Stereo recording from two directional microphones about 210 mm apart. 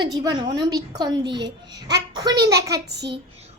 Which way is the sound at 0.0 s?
20° right (ahead or behind).